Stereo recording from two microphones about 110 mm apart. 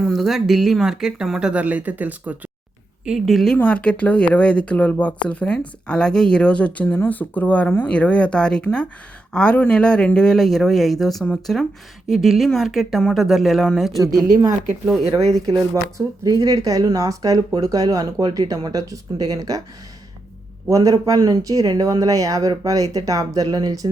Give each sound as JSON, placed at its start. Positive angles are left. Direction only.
{"t": 0.0, "sound": "speech", "side_deg": 0}
{"t": 3.0, "sound": "speech", "side_deg": 0}
{"t": 15.4, "sound": "speech", "side_deg": -30}
{"t": 20.7, "sound": "speech", "side_deg": -30}